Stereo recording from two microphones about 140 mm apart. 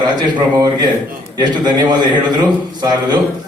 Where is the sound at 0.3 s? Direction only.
30° right (ahead or behind).